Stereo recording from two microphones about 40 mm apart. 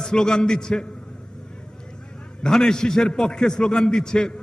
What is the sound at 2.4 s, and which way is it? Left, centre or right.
A man's voice, centre.